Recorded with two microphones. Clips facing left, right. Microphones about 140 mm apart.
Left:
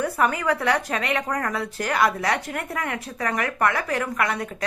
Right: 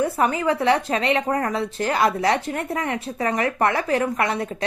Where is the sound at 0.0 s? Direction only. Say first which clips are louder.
Right 2 dB; 25° right (ahead or behind).